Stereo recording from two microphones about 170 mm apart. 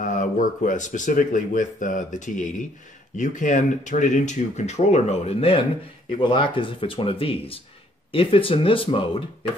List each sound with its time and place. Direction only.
0.0 s speech: 50° left (ahead or behind); by 9.2 s 30° left (ahead or behind)